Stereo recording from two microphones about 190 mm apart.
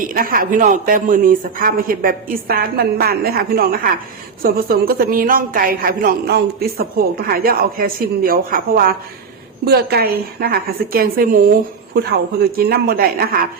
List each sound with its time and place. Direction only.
0.1 s a woman's voice: 50° right (ahead or behind)